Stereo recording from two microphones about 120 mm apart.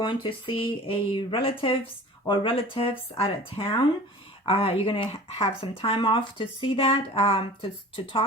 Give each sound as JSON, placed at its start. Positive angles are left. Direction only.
{"t": 0.0, "sound": "speech", "side_deg": 45}